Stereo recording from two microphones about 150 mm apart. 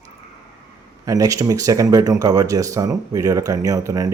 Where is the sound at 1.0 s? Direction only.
25° right (ahead or behind).